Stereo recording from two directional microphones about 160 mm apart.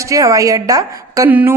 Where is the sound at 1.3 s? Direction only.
10° right (ahead or behind).